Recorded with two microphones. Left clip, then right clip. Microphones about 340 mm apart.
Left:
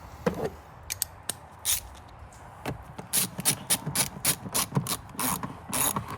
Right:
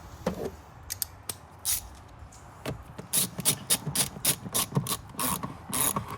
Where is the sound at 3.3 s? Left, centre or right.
Centre.